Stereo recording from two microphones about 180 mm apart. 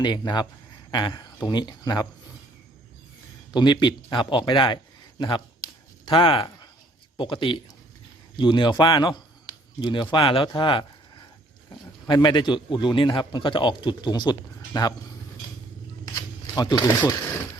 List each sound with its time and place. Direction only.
0.0 s a man's voice: 25° left (ahead or behind)
3.5 s a man's voice: 25° left (ahead or behind)
6.1 s a man's voice: 30° left (ahead or behind)
16.6 s a man's voice: 25° left (ahead or behind)